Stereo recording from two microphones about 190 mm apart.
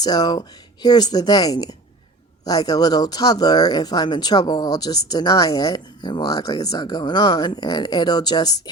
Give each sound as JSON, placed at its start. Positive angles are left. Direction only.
{"t": 0.0, "sound": "speech", "side_deg": 20}